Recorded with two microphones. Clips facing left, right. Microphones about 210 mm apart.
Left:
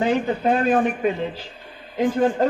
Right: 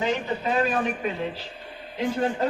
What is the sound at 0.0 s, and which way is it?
Speech, 55° left (ahead or behind).